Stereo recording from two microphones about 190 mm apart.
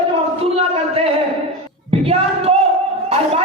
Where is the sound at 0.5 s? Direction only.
30° right (ahead or behind).